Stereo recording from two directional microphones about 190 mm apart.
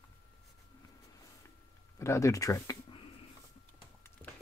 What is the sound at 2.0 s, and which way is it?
Speech, 15° left (ahead or behind).